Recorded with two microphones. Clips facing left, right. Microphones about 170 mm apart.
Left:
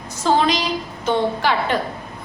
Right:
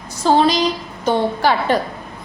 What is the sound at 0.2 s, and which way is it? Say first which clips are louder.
A woman's voice: right 4 dB; 35° right (ahead or behind).